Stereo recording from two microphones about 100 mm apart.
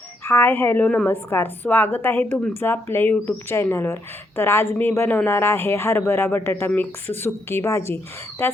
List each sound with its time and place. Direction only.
0.3 s speech: 25° left (ahead or behind)